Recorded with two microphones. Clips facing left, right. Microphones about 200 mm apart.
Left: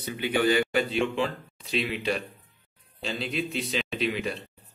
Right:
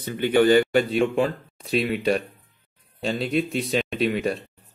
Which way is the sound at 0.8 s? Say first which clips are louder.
Right 5 dB; centre (ahead or behind).